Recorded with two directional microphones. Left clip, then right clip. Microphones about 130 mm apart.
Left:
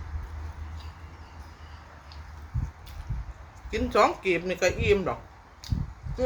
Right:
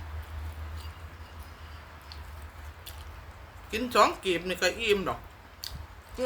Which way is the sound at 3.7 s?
15° right (ahead or behind).